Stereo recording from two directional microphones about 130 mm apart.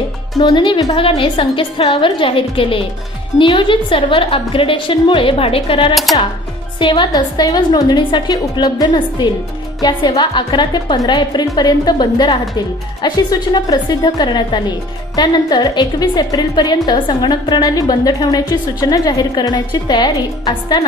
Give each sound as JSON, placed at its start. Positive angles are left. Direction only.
{"t": 0.4, "sound": "a woman's voice", "side_deg": 40}